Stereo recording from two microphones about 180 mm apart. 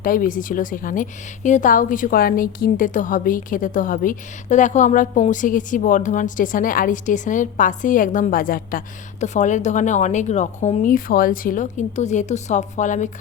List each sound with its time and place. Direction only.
0.0 s a woman's voice: 50° left (ahead or behind)
9.2 s a woman's voice: 40° left (ahead or behind)